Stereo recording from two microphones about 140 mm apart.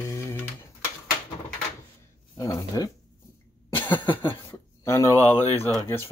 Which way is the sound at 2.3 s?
25° left (ahead or behind).